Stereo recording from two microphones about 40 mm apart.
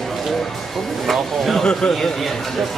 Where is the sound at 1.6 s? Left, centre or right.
Centre.